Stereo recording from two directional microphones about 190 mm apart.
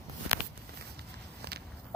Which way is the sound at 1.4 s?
60° right (ahead or behind).